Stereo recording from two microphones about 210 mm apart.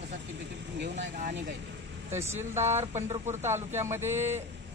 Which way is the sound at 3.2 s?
10° right (ahead or behind).